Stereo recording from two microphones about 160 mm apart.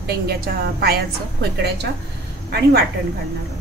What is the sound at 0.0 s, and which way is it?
A woman's voice, 80° right.